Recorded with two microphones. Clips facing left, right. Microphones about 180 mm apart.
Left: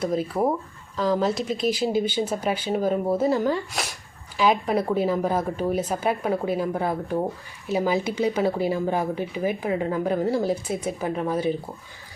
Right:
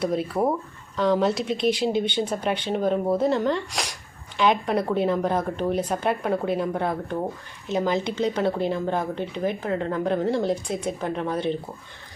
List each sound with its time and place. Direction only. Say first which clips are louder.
0.0 s speech: even; centre (ahead or behind)